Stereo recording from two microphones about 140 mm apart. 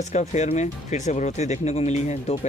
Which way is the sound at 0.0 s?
55° left (ahead or behind).